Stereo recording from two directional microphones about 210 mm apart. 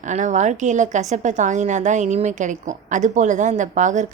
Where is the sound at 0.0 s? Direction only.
35° right (ahead or behind).